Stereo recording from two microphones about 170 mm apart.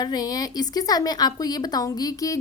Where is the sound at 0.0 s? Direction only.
25° left (ahead or behind).